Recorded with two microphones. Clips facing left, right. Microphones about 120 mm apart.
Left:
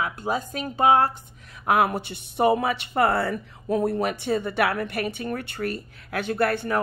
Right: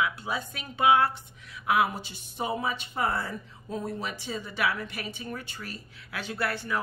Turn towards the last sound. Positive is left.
turn(degrees=55)  # may be behind; listen again after turning